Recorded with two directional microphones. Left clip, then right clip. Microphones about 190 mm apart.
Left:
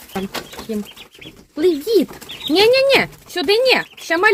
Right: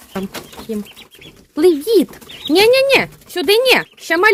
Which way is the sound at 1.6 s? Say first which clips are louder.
Right 3 dB; 25° right (ahead or behind).